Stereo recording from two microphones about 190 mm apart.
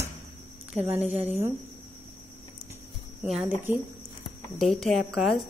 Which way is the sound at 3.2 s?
5° right (ahead or behind).